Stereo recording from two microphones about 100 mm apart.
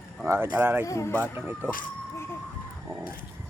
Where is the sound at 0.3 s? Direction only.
25° right (ahead or behind).